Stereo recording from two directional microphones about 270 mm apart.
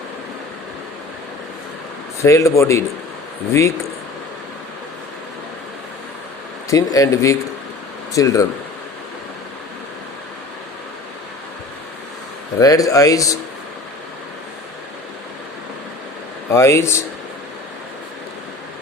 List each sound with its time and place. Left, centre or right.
2.2 s speech: centre
6.7 s speech: centre
12.5 s speech: centre
16.5 s speech: centre